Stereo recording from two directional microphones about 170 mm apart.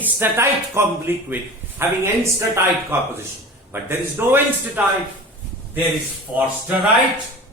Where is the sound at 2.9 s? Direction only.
15° right (ahead or behind).